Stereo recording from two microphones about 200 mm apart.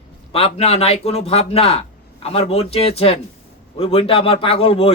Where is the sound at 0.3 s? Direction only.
30° left (ahead or behind).